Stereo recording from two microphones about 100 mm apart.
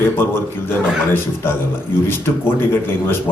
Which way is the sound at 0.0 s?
25° left (ahead or behind).